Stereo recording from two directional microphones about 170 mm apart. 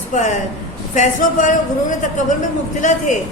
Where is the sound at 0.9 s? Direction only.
45° left (ahead or behind).